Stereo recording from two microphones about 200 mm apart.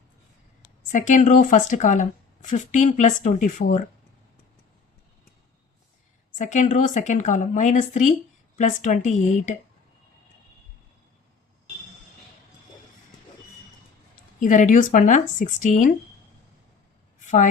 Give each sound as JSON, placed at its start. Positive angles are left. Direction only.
{"t": 0.9, "sound": "speech", "side_deg": 40}
{"t": 6.3, "sound": "speech", "side_deg": 40}
{"t": 14.3, "sound": "speech", "side_deg": 40}
{"t": 17.2, "sound": "a sound", "side_deg": 40}